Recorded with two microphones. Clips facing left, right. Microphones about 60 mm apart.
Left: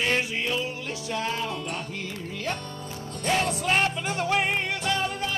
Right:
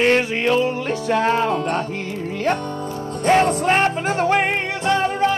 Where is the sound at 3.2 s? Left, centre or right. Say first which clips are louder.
Right 9 dB; right.